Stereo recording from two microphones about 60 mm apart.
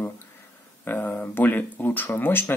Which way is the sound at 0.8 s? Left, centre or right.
Left.